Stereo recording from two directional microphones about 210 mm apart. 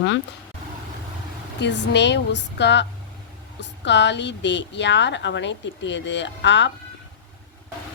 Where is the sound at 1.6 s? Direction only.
55° left (ahead or behind).